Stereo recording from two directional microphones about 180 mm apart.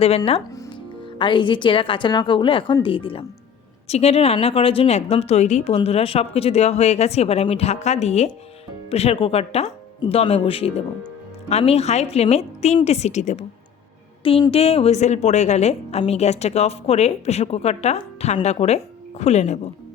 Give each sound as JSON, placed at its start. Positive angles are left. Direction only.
{"t": 1.2, "sound": "a woman's voice", "side_deg": 25}